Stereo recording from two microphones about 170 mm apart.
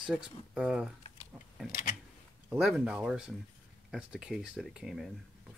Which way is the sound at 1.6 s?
55° left (ahead or behind).